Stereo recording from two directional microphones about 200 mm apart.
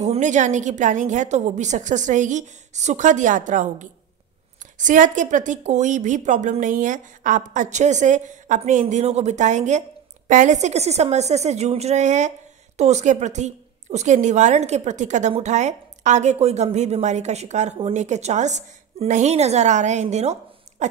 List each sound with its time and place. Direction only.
0.0 s a woman's voice: 35° right (ahead or behind)
20.8 s dog: 35° right (ahead or behind)